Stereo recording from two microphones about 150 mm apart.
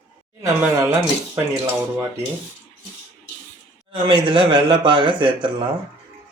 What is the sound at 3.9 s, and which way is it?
Speech, 35° right (ahead or behind).